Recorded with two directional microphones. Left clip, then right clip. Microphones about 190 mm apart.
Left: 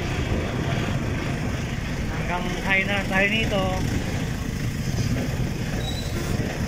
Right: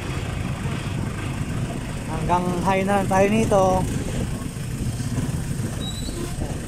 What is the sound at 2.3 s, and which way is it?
Speech, 20° right (ahead or behind).